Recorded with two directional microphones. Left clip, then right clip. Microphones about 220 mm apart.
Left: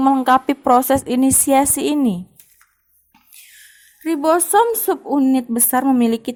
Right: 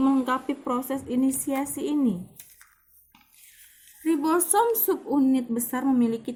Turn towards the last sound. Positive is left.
turn(degrees=45)  # may be behind; listen again after turning